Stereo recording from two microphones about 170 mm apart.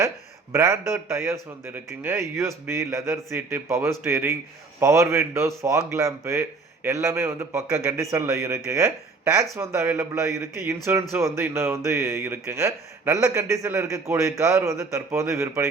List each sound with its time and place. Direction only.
0.5 s speech: 15° right (ahead or behind)